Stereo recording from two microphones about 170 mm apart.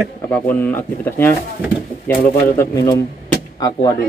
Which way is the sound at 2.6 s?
20° left (ahead or behind).